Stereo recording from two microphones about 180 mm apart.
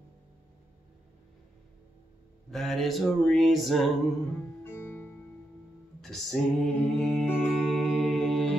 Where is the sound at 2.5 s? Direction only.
Centre (ahead or behind).